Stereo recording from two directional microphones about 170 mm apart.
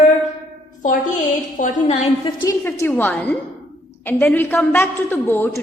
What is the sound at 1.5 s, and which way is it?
A woman's voice, 45° left (ahead or behind).